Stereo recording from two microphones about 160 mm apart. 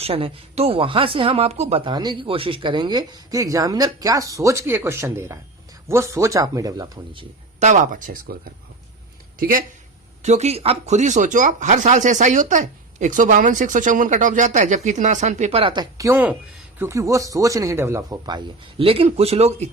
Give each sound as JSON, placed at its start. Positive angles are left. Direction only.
{"t": 0.0, "sound": "speech", "side_deg": -40}
{"t": 1.9, "sound": "speech", "side_deg": -25}
{"t": 7.6, "sound": "speech", "side_deg": -50}
{"t": 10.2, "sound": "speech", "side_deg": -45}